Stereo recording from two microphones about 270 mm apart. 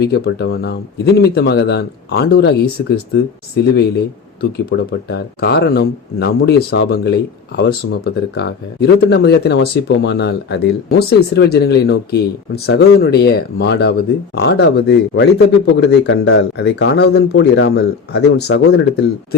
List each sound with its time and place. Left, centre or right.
0.0 s speech: left